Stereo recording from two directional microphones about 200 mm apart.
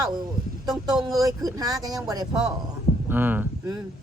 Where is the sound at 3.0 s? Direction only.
10° right (ahead or behind).